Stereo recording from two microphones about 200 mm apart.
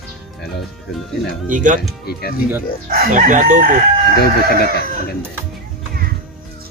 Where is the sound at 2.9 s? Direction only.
40° right (ahead or behind).